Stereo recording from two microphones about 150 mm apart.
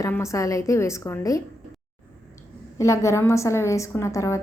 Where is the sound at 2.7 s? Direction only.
20° left (ahead or behind).